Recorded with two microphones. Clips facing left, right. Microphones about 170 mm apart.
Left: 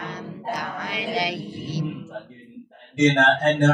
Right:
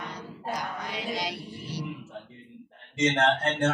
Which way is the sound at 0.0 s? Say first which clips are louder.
Left 5 dB; 90° left.